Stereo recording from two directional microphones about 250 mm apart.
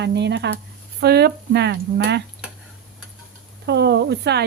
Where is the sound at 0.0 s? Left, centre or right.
Right.